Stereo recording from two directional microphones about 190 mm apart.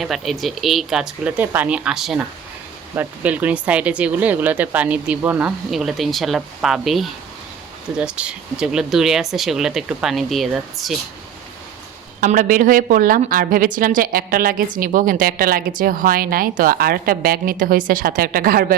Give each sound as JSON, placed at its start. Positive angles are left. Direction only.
{"t": 0.0, "sound": "speech", "side_deg": 0}
{"t": 12.2, "sound": "a woman's voice", "side_deg": -45}